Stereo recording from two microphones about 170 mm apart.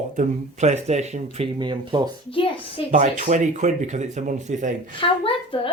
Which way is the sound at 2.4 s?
30° left (ahead or behind).